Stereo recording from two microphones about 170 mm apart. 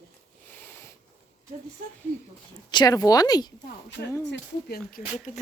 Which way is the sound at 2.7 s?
25° left (ahead or behind).